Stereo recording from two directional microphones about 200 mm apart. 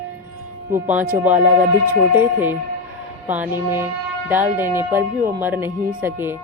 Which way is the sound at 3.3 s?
10° right (ahead or behind).